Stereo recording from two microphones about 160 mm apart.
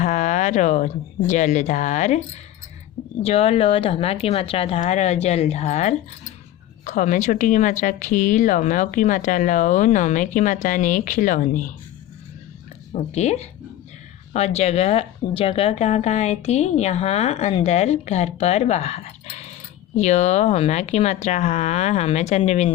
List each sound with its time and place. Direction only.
0.0 s a sound: 50° left (ahead or behind)
1.3 s a woman's voice: 50° left (ahead or behind)
12.9 s a woman's voice: 45° left (ahead or behind)